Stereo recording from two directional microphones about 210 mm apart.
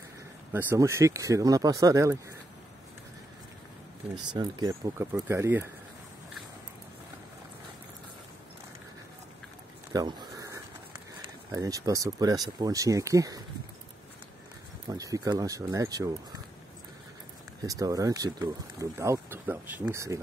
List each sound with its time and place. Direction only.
0.5 s speech: 10° right (ahead or behind)
4.3 s speech: 20° right (ahead or behind)
9.9 s a sound: 20° right (ahead or behind)
11.5 s speech: 15° right (ahead or behind)
14.9 s speech: 15° right (ahead or behind)
17.6 s speech: 15° right (ahead or behind)